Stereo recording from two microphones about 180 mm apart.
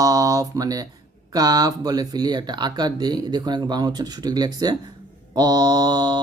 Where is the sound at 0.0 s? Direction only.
20° right (ahead or behind).